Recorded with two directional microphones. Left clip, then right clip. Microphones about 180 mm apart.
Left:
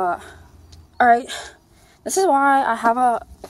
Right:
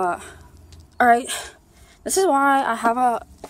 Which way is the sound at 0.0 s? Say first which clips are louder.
Left 1 dB; 15° right (ahead or behind).